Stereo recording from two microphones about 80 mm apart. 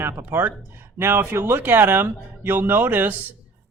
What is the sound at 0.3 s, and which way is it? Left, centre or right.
Speech, right.